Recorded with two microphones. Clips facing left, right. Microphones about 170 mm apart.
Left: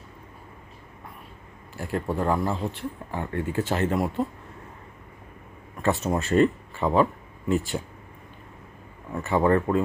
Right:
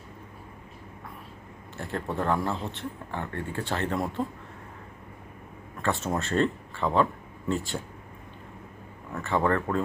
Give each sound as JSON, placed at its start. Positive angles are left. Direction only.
{"t": 1.8, "sound": "speech", "side_deg": 5}
{"t": 4.2, "sound": "speech", "side_deg": 10}
{"t": 5.8, "sound": "speech", "side_deg": 15}
{"t": 9.3, "sound": "speech", "side_deg": 15}